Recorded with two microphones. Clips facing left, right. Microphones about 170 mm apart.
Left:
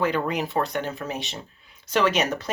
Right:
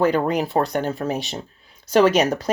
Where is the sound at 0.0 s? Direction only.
40° right (ahead or behind).